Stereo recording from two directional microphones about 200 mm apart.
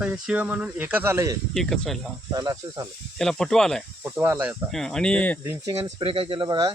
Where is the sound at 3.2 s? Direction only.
Centre (ahead or behind).